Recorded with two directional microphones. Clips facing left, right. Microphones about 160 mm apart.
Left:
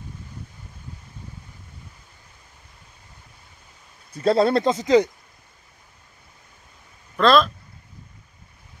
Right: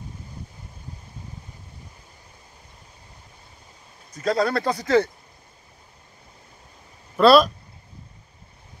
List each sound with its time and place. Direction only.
4.1 s speech: 30° left (ahead or behind)
7.2 s speech: 10° right (ahead or behind)